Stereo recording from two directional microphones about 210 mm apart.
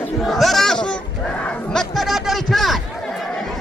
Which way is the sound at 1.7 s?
Centre (ahead or behind).